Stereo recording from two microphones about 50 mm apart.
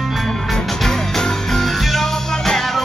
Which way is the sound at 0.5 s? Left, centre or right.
Centre.